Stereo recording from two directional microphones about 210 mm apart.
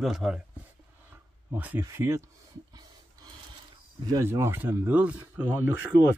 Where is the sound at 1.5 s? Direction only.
10° right (ahead or behind).